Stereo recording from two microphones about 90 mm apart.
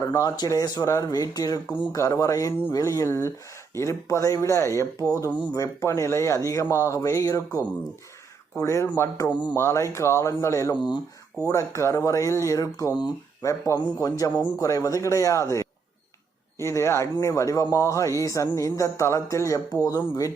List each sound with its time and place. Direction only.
0.0 s speech: 40° left (ahead or behind)
10.8 s speech: 55° left (ahead or behind)
11.4 s speech: 35° left (ahead or behind)
19.7 s speech: 45° left (ahead or behind)